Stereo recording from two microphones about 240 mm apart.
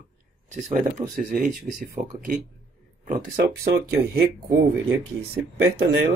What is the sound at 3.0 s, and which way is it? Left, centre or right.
Speech, right.